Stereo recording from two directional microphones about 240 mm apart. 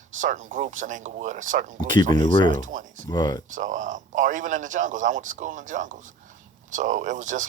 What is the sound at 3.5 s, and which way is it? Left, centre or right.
A man's voice, right.